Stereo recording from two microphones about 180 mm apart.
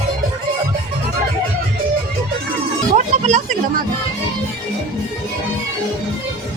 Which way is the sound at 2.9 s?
40° right (ahead or behind).